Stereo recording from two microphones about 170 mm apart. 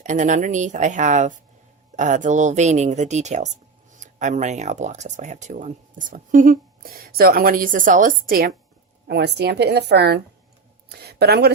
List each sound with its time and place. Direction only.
0.0 s speech: 45° right (ahead or behind)
9.0 s a woman's voice: 80° right